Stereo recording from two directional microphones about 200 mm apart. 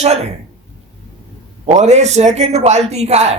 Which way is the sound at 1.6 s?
35° right (ahead or behind).